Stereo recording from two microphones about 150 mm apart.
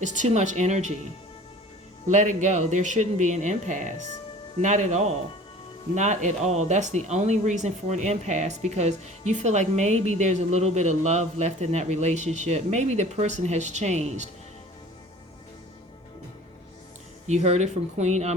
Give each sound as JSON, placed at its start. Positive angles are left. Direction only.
{"t": 0.0, "sound": "speech", "side_deg": -55}
{"t": 2.0, "sound": "speech", "side_deg": -55}
{"t": 17.2, "sound": "speech", "side_deg": -50}